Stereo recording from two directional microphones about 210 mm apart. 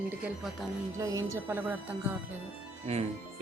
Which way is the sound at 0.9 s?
15° right (ahead or behind).